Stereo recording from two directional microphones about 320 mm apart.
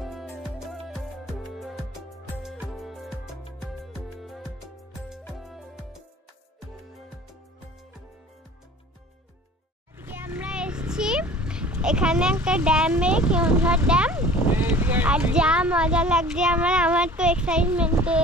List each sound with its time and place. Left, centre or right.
0.0 s music: centre
9.9 s a child's voice: centre